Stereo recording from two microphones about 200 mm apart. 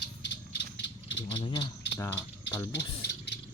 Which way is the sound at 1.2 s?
30° left (ahead or behind).